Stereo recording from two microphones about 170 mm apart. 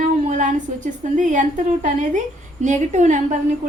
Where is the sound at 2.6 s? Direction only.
45° right (ahead or behind).